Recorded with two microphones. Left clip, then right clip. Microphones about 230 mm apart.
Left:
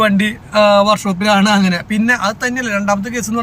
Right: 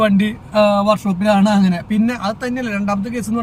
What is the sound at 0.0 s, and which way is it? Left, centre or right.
Speech, centre.